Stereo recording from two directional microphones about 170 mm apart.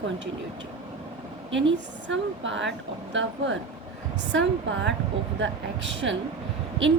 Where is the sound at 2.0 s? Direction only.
90° right.